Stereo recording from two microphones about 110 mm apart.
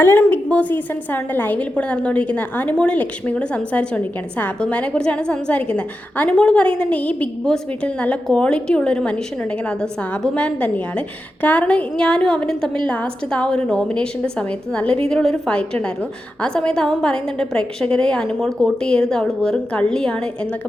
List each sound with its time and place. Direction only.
0.0 s a woman's voice: 20° left (ahead or behind)